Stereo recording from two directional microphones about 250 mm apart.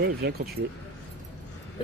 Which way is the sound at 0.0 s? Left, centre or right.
Right.